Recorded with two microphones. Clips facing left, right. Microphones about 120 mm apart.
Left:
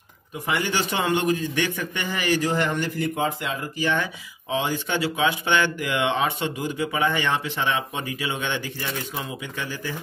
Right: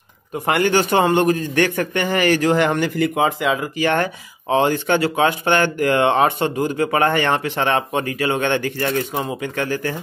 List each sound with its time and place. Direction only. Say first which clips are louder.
0.3 s a man's voice: right 8 dB; 60° right (ahead or behind)